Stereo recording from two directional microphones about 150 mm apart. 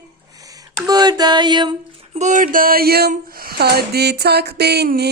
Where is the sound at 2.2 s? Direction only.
55° right (ahead or behind).